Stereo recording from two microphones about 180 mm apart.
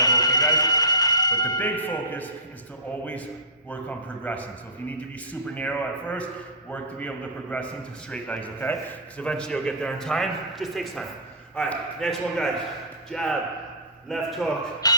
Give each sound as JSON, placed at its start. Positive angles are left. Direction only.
{"t": 0.0, "sound": "music", "side_deg": 20}
{"t": 3.7, "sound": "a man's voice", "side_deg": 10}
{"t": 14.8, "sound": "music", "side_deg": 20}